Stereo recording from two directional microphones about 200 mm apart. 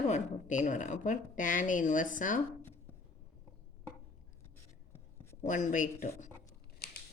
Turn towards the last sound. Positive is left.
turn(degrees=50)  # may be behind; listen again after turning